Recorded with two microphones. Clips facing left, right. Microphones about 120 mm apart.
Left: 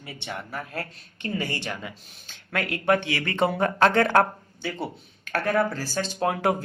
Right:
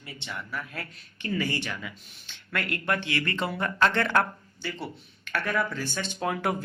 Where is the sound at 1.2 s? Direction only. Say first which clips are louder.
Even; 25° left (ahead or behind).